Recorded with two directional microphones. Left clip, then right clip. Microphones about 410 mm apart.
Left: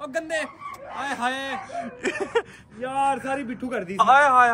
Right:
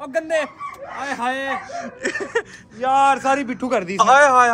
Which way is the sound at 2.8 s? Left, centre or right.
Centre.